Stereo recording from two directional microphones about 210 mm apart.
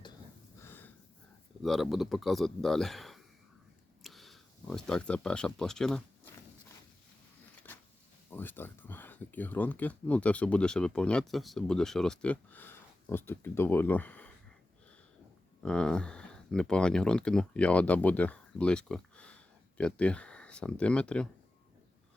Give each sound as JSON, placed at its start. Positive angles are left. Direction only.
{"t": 0.6, "sound": "a sound", "side_deg": 10}
{"t": 1.6, "sound": "speech", "side_deg": 0}
{"t": 4.0, "sound": "a sound", "side_deg": 0}
{"t": 5.5, "sound": "speech", "side_deg": 0}
{"t": 8.3, "sound": "speech", "side_deg": 10}
{"t": 15.6, "sound": "speech", "side_deg": 5}